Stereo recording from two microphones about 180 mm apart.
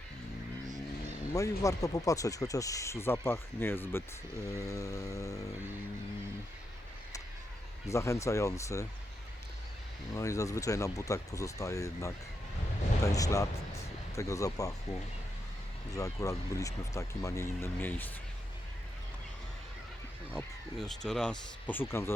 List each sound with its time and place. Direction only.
1.3 s speech: 20° left (ahead or behind)
4.4 s a sound: 20° left (ahead or behind)
7.9 s speech: 15° left (ahead or behind)
10.2 s speech: 15° left (ahead or behind)
13.0 s a sound: 20° left (ahead or behind)
15.9 s speech: 20° left (ahead or behind)
20.3 s speech: centre (ahead or behind)